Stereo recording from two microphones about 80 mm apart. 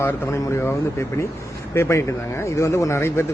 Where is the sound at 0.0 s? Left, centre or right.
Left.